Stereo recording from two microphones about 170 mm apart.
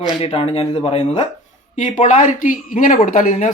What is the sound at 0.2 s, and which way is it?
Speech, 35° left (ahead or behind).